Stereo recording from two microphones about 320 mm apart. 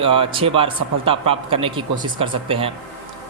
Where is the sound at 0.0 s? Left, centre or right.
Centre.